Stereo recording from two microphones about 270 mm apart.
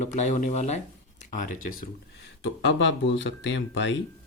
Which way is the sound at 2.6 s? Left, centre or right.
Left.